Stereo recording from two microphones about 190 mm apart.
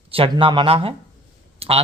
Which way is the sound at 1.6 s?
30° right (ahead or behind).